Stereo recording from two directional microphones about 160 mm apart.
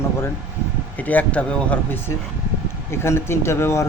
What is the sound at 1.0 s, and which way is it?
Speech, 10° left (ahead or behind).